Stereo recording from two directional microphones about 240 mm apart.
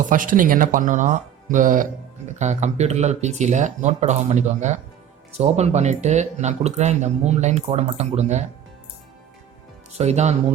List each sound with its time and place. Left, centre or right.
0.1 s speech: right
9.9 s speech: right